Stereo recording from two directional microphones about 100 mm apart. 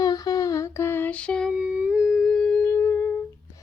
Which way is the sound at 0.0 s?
40° left (ahead or behind).